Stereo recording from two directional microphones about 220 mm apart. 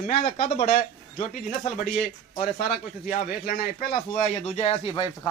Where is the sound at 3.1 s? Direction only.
35° left (ahead or behind).